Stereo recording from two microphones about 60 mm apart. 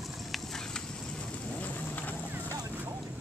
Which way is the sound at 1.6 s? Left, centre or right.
Left.